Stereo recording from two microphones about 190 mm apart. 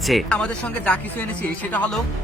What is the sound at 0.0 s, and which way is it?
Speech, centre (ahead or behind).